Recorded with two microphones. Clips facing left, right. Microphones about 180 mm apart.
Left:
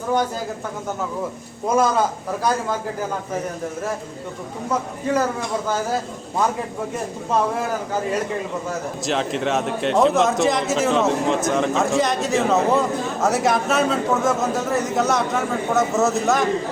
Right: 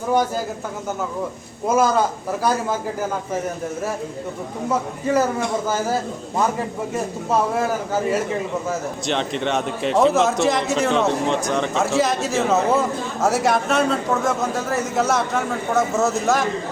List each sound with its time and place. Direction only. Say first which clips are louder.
1.6 s speech: right 1 dB; 5° right (ahead or behind)
9.0 s speech: left 1 dB; centre (ahead or behind)